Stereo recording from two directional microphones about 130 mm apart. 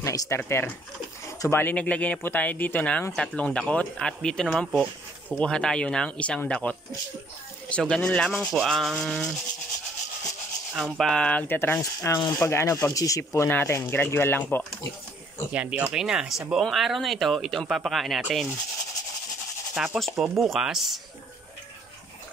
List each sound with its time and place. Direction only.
0.0 s speech: 25° left (ahead or behind); by 9.3 s centre (ahead or behind)
10.7 s speech: centre (ahead or behind); by 14.6 s 15° left (ahead or behind)
15.5 s speech: 10° right (ahead or behind)
19.7 s speech: 5° right (ahead or behind)